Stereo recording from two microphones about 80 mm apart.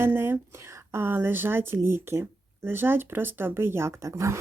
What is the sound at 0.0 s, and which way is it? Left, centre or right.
Speech, right.